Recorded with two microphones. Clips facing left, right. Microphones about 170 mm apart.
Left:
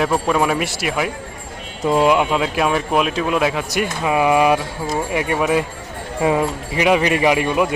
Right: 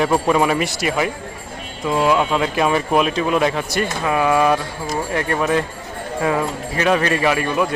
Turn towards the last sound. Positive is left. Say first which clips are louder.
# left 2 dB
turn(degrees=15)  # may be behind; listen again after turning